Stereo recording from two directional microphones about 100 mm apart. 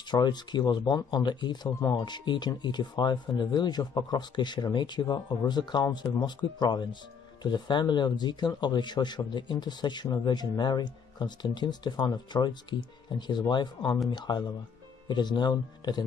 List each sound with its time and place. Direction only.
0.1 s speech: 45° left (ahead or behind)